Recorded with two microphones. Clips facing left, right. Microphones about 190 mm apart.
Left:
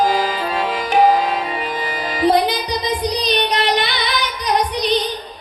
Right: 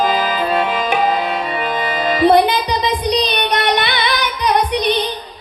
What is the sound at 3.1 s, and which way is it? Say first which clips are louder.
Female singing: right 1 dB; 60° right (ahead or behind).